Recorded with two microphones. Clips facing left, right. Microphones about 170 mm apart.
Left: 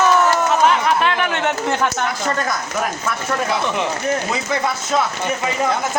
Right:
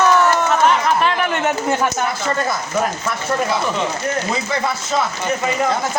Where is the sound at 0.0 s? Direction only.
5° left (ahead or behind).